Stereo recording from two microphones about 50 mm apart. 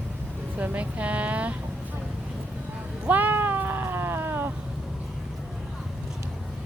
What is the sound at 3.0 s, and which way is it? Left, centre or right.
Cat, right.